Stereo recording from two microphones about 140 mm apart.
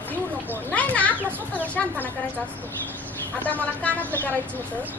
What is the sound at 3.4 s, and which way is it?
Speech, 10° left (ahead or behind).